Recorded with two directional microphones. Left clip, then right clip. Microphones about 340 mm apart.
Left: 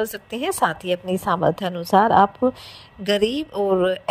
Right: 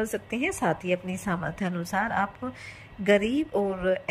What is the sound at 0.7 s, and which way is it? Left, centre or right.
Speech, centre.